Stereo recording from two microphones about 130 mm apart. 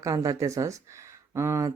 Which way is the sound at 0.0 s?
25° right (ahead or behind).